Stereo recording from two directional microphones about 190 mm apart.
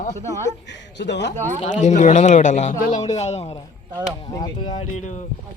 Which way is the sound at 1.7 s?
40° left (ahead or behind).